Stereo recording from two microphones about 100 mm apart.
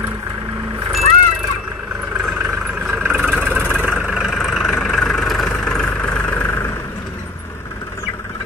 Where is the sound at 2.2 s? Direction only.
5° right (ahead or behind); by 6.7 s 20° left (ahead or behind).